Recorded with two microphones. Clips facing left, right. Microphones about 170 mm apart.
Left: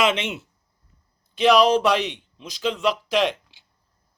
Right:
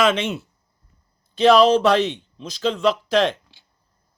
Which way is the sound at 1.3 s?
15° left (ahead or behind).